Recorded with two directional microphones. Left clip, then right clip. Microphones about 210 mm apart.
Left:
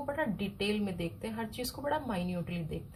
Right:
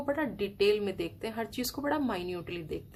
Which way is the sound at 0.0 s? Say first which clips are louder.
Right 3 dB; 45° right (ahead or behind).